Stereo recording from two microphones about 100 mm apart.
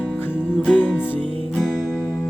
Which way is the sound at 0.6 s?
15° left (ahead or behind).